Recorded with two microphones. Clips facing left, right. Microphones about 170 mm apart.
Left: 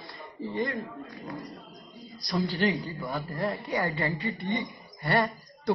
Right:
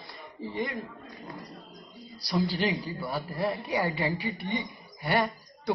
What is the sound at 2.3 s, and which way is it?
A man's voice, 15° right (ahead or behind).